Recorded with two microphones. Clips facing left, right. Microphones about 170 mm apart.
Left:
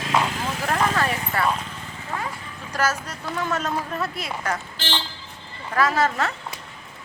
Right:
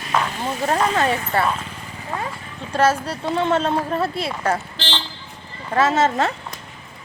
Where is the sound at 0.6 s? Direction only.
25° right (ahead or behind).